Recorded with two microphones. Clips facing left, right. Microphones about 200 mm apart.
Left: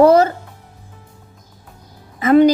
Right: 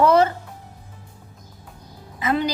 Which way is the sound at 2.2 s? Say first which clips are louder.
Left 12 dB; 50° left (ahead or behind).